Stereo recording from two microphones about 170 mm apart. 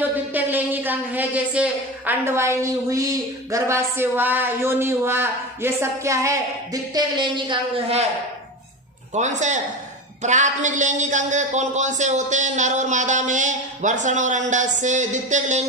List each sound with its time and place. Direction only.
0.1 s speech: 10° right (ahead or behind); by 8.0 s 25° right (ahead or behind)
9.1 s a man's voice: 45° right (ahead or behind)